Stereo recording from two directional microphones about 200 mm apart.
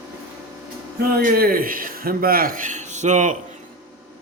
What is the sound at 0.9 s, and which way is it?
A man's voice, 50° right (ahead or behind).